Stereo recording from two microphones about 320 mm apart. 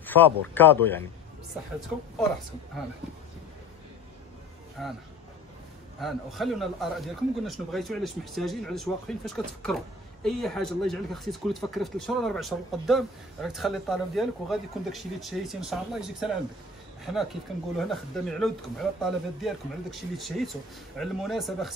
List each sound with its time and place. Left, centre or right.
0.0 s speech: centre
5.9 s speech: centre